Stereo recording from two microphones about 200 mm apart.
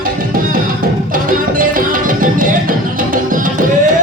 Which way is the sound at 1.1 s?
45° right (ahead or behind).